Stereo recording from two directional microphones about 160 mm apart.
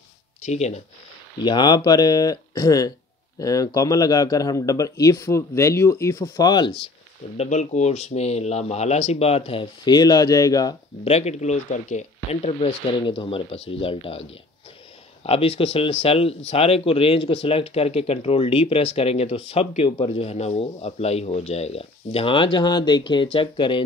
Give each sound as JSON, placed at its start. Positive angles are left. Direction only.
{"t": 0.4, "sound": "speech", "side_deg": 45}
{"t": 1.4, "sound": "speech", "side_deg": 25}
{"t": 7.3, "sound": "speech", "side_deg": 45}
{"t": 11.1, "sound": "speech", "side_deg": 45}
{"t": 15.2, "sound": "speech", "side_deg": 40}